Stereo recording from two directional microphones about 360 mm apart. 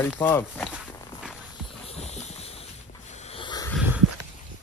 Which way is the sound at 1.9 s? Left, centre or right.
Centre.